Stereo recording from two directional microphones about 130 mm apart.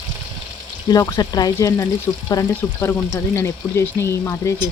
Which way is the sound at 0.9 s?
30° left (ahead or behind).